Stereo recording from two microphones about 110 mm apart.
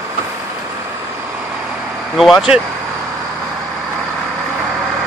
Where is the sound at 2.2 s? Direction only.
Centre (ahead or behind).